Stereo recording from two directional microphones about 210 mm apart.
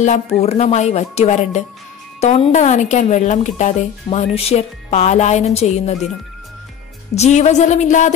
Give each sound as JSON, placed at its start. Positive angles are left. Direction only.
{"t": 0.4, "sound": "speech", "side_deg": 30}
{"t": 7.2, "sound": "speech", "side_deg": 35}